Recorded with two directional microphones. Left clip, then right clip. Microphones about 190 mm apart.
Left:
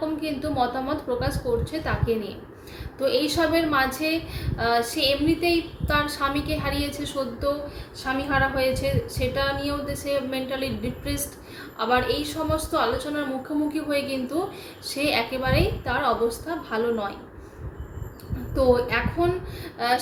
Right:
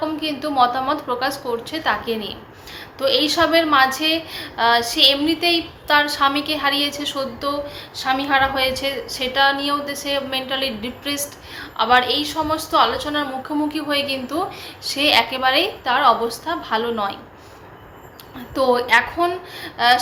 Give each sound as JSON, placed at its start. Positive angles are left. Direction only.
{"t": 0.2, "sound": "a woman's voice", "side_deg": 15}
{"t": 18.5, "sound": "a woman's voice", "side_deg": 15}